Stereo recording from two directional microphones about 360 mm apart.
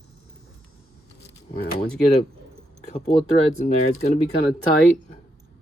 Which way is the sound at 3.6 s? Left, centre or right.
Centre.